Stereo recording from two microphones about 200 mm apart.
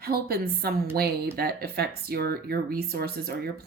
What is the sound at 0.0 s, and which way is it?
Speech, 50° right (ahead or behind).